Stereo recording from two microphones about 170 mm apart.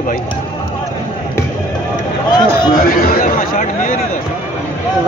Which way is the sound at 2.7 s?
60° left (ahead or behind).